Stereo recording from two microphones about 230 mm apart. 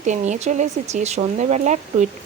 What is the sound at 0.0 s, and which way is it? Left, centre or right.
Speech, right.